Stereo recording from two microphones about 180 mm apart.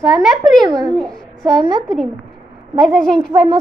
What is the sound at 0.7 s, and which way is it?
Speech, 20° right (ahead or behind).